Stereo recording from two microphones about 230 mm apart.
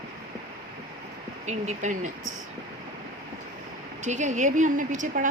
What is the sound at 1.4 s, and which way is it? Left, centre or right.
Speech, right.